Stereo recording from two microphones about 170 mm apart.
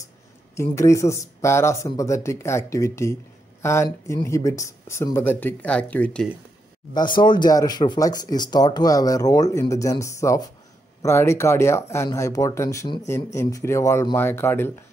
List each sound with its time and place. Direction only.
0.6 s speech: 15° left (ahead or behind)
6.9 s speech: 25° left (ahead or behind)